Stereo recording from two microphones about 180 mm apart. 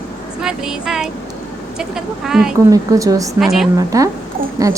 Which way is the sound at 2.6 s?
20° right (ahead or behind).